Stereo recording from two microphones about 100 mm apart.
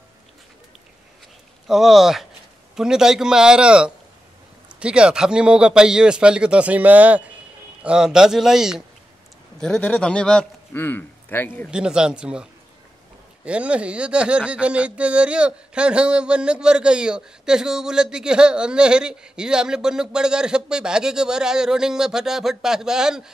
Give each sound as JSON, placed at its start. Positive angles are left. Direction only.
{"t": 1.7, "sound": "a man's voice", "side_deg": -5}
{"t": 9.6, "sound": "a man's voice", "side_deg": 10}
{"t": 10.7, "sound": "a man's voice", "side_deg": 20}
{"t": 11.7, "sound": "speech", "side_deg": -10}